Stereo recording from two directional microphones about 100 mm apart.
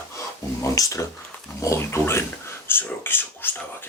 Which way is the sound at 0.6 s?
30° left (ahead or behind).